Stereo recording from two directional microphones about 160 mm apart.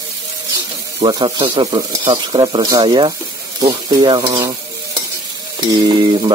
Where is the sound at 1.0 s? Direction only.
30° right (ahead or behind).